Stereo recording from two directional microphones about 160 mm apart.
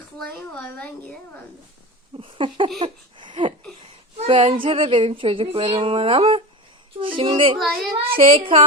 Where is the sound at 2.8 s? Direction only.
30° right (ahead or behind).